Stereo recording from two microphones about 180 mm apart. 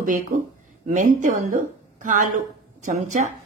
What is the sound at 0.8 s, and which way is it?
Speech, 45° right (ahead or behind).